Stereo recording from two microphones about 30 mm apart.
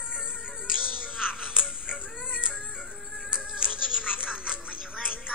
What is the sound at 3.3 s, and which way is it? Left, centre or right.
Music, right.